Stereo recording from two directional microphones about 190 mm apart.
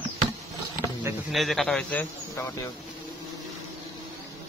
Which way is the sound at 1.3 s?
Centre (ahead or behind).